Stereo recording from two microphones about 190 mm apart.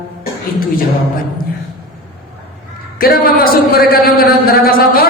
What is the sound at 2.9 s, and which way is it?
Mantra, 50° left (ahead or behind).